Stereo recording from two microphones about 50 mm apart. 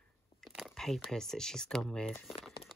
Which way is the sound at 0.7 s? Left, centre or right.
Centre.